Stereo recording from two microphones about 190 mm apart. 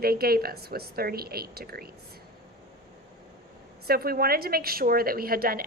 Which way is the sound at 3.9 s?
50° right (ahead or behind).